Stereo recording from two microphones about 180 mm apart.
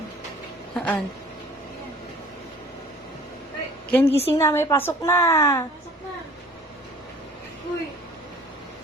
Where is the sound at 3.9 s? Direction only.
15° left (ahead or behind).